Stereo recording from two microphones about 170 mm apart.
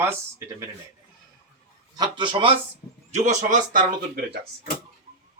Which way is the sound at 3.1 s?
45° right (ahead or behind).